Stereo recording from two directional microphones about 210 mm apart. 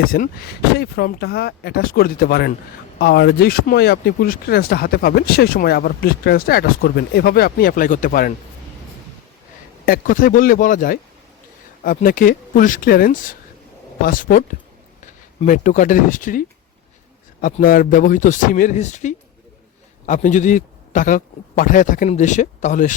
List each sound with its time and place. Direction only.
0.0 s speech: 45° left (ahead or behind)
9.8 s a man's voice: 40° left (ahead or behind)